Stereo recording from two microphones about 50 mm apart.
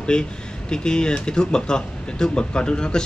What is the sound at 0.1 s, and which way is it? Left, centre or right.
Speech, centre.